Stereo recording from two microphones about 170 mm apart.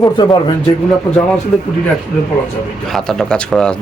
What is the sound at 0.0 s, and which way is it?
Speech, 25° left (ahead or behind).